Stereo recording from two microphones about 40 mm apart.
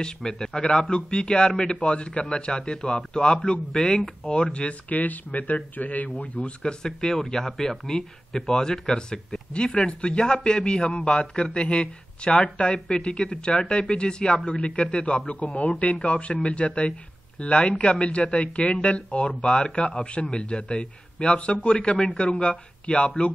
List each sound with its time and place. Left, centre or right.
0.0 s speech: centre
3.7 s speech: centre; by 6.5 s left
6.6 s speech: centre